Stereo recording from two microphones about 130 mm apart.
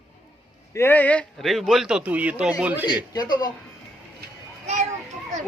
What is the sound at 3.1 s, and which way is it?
Speech, 30° left (ahead or behind).